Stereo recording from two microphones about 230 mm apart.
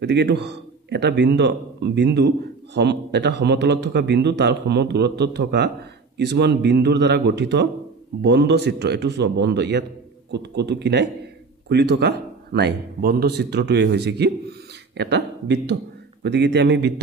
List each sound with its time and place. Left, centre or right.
0.0 s a man's voice: right